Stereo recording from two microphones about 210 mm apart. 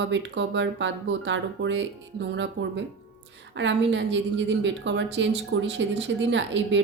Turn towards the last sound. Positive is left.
turn(degrees=-60)  # may be behind; listen again after turning